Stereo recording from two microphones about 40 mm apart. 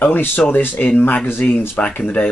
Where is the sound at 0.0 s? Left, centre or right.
Left.